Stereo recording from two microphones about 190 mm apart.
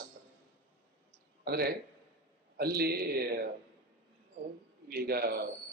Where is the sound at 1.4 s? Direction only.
55° right (ahead or behind).